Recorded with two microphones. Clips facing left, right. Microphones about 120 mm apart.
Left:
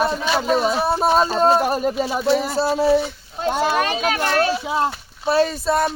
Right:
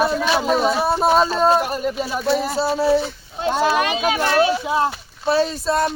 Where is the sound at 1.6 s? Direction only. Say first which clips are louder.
Left 3 dB; 40° left (ahead or behind).